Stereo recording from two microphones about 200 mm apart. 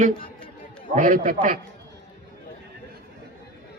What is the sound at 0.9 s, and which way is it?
Speech, 40° right (ahead or behind).